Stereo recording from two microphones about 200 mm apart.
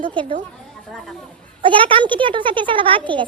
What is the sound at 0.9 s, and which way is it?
Speech, centre (ahead or behind).